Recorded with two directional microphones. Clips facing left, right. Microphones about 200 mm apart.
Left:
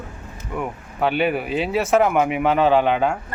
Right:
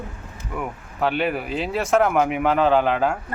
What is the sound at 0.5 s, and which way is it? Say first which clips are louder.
Speech: left 2 dB; centre (ahead or behind).